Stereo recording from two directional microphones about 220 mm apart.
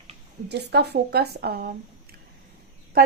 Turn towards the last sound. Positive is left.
turn(degrees=-40)  # may be behind; listen again after turning